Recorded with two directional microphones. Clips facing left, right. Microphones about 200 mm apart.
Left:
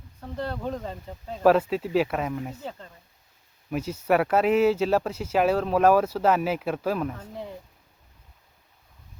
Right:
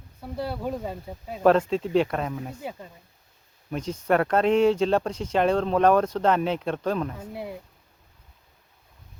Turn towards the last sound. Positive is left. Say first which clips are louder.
# right 2 dB
turn(degrees=-10)  # may be behind; listen again after turning